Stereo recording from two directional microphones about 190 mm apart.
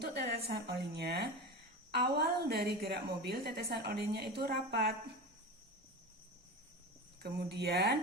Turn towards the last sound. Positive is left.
turn(degrees=-60)  # may be behind; listen again after turning